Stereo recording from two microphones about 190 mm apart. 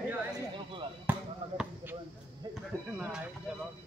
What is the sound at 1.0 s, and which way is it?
Basketball bounce, 5° right (ahead or behind).